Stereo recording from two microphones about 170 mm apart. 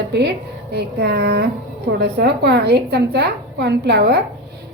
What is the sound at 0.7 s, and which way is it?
A woman's voice, 75° right (ahead or behind).